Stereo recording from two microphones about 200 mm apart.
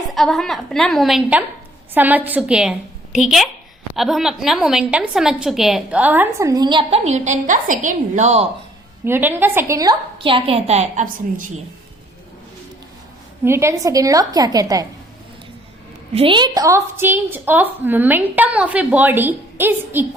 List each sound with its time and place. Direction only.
0.1 s a woman's voice: centre (ahead or behind); by 8.4 s 35° right (ahead or behind)
9.0 s a woman's voice: 10° right (ahead or behind); by 11.5 s 40° right (ahead or behind)
13.4 s a woman's voice: 10° right (ahead or behind)
16.1 s a woman's voice: 25° right (ahead or behind)